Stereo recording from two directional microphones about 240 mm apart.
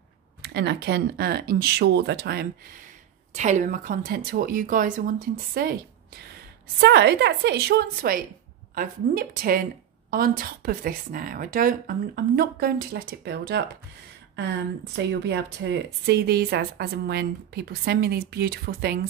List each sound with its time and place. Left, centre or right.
0.4 s speech: right
3.3 s speech: right
6.8 s speech: right
15.0 s speech: right